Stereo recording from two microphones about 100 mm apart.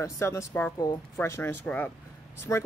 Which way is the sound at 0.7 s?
40° left (ahead or behind).